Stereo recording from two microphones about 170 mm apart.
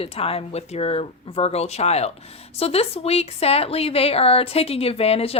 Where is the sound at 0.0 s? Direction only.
35° left (ahead or behind).